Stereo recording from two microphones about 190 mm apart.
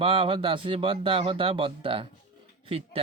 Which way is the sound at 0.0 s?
30° right (ahead or behind).